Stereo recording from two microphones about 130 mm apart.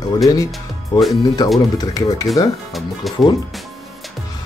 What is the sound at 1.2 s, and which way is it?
Speech, 30° left (ahead or behind).